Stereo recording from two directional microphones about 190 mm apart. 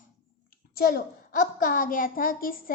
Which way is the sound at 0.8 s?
50° left (ahead or behind).